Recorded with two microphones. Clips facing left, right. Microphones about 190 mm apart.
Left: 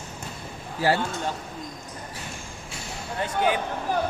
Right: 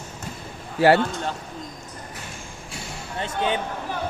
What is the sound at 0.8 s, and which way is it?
Speech, 70° right (ahead or behind).